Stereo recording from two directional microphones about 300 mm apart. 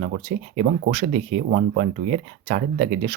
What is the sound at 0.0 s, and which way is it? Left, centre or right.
Speech, right.